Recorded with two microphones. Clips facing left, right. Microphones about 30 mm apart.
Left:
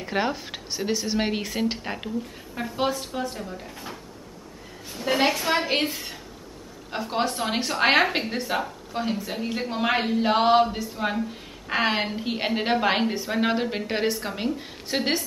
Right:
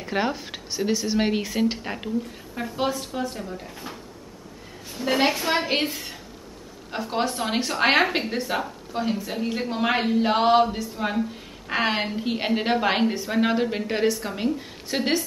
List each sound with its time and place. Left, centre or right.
0.0 s speech: centre
14.3 s speech: centre